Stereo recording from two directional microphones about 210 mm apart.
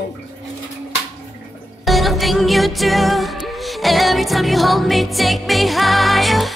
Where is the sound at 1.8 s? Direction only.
Centre (ahead or behind).